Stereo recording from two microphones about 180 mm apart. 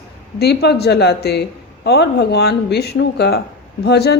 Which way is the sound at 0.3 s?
65° left (ahead or behind).